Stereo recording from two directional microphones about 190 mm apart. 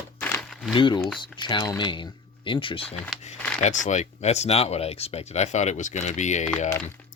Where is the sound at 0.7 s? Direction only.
25° left (ahead or behind).